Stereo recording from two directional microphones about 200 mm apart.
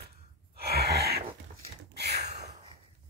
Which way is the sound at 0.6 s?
55° right (ahead or behind).